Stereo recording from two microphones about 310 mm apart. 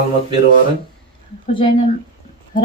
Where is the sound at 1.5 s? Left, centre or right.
Centre.